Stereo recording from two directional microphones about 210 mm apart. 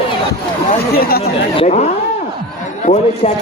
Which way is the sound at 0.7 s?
45° left (ahead or behind).